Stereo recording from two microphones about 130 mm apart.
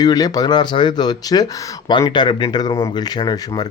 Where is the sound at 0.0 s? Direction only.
30° left (ahead or behind).